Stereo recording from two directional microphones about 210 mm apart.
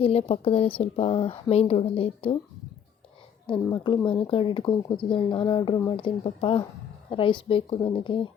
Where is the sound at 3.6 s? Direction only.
20° left (ahead or behind).